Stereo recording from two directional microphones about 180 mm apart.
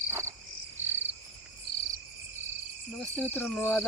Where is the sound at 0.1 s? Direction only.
15° right (ahead or behind).